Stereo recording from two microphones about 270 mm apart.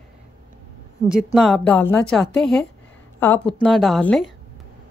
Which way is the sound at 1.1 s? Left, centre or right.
Centre.